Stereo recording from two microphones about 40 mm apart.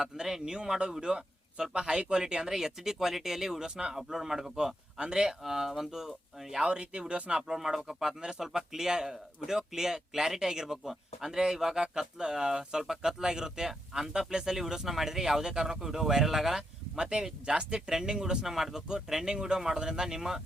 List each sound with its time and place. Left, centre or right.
0.0 s speech: centre
5.4 s speech: centre
6.7 s speech: right
7.3 s speech: centre
16.9 s speech: centre